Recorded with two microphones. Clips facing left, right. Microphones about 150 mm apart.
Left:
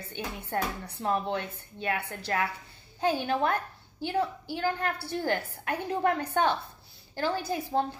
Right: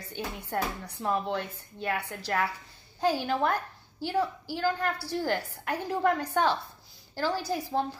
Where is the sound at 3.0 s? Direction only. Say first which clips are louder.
Even; 20° left (ahead or behind).